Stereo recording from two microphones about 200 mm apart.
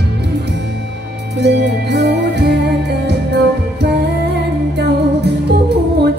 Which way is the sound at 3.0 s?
55° right (ahead or behind).